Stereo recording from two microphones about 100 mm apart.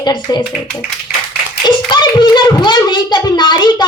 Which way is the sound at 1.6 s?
50° left (ahead or behind).